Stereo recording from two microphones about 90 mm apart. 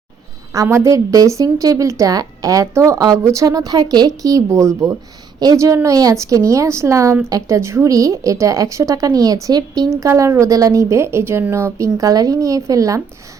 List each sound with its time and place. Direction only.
0.5 s speech: 35° right (ahead or behind)
11.9 s speech: 40° right (ahead or behind)